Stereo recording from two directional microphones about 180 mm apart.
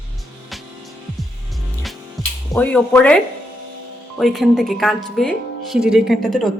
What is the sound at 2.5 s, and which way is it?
Speech, 5° left (ahead or behind).